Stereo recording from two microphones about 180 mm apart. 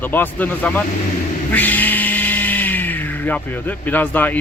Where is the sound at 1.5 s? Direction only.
10° left (ahead or behind).